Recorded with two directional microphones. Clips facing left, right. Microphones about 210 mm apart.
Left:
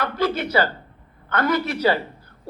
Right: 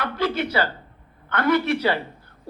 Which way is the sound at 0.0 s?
45° left (ahead or behind).